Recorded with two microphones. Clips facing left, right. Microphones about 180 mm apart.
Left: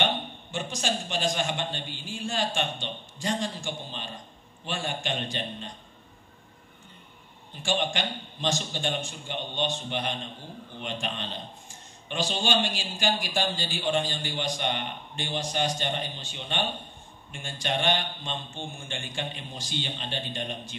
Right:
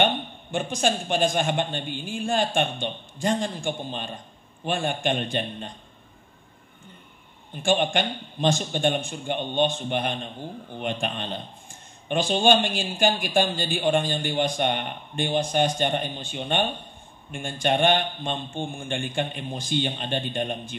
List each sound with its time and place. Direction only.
0.0 s a man's voice: 55° right (ahead or behind)
7.5 s a man's voice: 55° right (ahead or behind)